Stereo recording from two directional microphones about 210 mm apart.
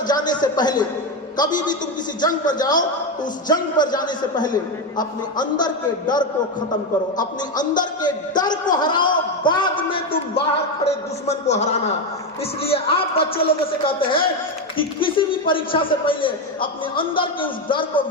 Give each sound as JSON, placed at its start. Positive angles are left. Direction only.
{"t": 0.1, "sound": "a man's voice", "side_deg": 20}
{"t": 7.6, "sound": "a man's voice", "side_deg": 40}
{"t": 8.0, "sound": "a man's voice", "side_deg": 20}